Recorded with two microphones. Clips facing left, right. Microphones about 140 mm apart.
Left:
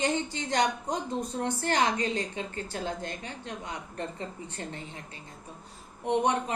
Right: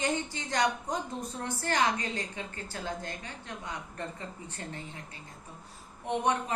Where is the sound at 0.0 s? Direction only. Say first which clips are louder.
Left 3 dB; 20° left (ahead or behind).